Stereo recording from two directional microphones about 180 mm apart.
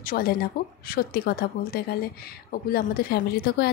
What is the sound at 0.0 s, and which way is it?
A woman's voice, 55° left (ahead or behind).